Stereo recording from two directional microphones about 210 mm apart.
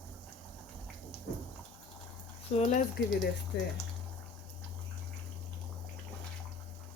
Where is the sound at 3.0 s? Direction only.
55° left (ahead or behind).